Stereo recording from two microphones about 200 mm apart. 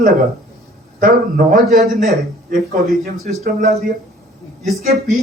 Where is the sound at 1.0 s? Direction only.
45° right (ahead or behind).